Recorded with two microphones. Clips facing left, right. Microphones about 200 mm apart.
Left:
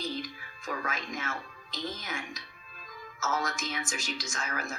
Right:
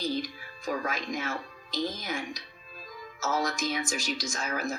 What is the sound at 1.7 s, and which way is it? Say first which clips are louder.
Speech: right 5 dB; 35° right (ahead or behind).